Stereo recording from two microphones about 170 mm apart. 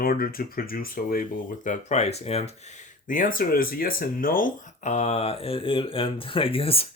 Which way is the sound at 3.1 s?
55° left (ahead or behind).